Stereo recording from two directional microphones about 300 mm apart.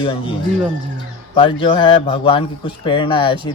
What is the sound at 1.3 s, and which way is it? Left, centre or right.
Speech, centre.